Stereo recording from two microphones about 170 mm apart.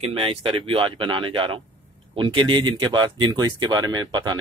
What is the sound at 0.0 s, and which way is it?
Speech, 35° right (ahead or behind).